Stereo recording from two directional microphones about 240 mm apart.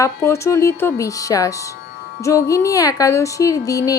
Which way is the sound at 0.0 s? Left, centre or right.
Centre.